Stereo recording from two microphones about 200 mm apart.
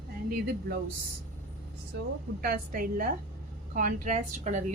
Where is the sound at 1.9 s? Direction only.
55° right (ahead or behind).